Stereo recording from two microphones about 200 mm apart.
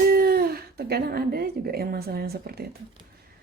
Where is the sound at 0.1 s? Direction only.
50° right (ahead or behind).